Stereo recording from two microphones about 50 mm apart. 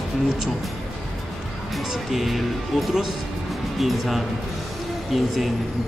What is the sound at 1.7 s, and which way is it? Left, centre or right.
Speech, centre.